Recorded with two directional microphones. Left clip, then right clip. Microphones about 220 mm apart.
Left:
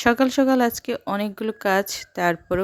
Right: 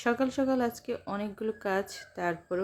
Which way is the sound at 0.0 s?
40° left (ahead or behind).